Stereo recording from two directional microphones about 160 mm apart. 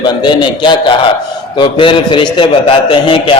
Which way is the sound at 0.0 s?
30° left (ahead or behind).